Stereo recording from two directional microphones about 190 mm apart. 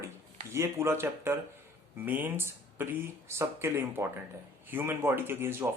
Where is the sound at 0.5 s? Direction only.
15° right (ahead or behind).